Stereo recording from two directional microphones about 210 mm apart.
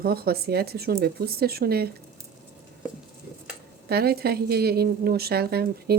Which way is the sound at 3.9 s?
50° right (ahead or behind).